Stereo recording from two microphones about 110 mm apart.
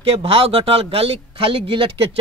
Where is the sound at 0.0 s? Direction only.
60° right (ahead or behind).